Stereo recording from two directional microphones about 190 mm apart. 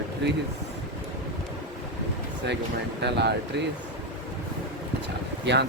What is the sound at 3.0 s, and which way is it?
Speech, 60° right (ahead or behind).